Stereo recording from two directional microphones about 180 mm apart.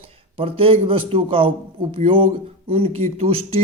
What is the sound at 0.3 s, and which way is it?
A man's voice, 30° right (ahead or behind).